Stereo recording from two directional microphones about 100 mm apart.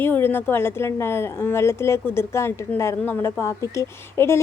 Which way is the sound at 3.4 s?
30° left (ahead or behind).